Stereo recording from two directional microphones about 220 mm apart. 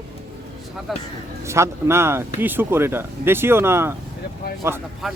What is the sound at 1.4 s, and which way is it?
Speech, 10° right (ahead or behind).